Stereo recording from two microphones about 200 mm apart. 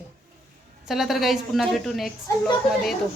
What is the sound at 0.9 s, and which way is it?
A woman's voice, centre (ahead or behind).